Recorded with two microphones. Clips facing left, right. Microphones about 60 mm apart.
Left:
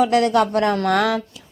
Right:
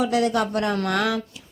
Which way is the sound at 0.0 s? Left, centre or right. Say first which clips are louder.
Left 5 dB; left.